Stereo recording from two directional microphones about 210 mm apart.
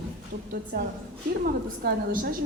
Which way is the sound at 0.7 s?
50° right (ahead or behind).